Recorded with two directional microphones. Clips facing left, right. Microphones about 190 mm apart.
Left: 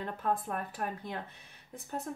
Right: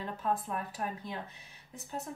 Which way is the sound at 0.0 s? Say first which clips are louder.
Left 1 dB; 55° left (ahead or behind).